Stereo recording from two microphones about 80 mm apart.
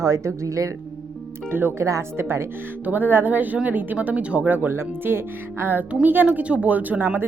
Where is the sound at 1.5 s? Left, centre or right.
Right.